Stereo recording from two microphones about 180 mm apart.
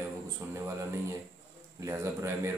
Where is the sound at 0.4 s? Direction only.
10° right (ahead or behind).